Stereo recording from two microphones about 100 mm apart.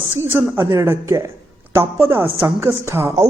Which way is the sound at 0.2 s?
25° right (ahead or behind).